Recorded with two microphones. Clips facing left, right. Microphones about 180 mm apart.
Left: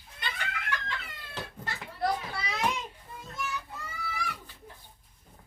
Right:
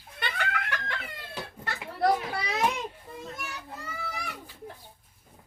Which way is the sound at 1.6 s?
65° right (ahead or behind).